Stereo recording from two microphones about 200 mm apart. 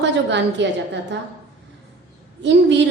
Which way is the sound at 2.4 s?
60° right (ahead or behind).